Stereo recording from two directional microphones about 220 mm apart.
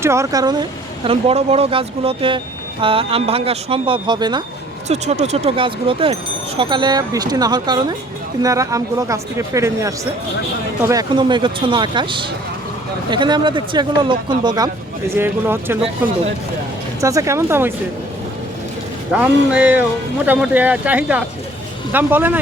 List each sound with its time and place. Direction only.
0.0 s speech: 15° right (ahead or behind)
4.9 s speech: 30° right (ahead or behind); by 15.8 s 10° right (ahead or behind)
17.0 s speech: 15° right (ahead or behind)
19.1 s speech: 5° right (ahead or behind)